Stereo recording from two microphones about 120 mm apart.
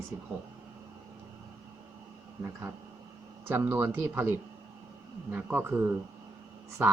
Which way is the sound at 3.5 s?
15° right (ahead or behind).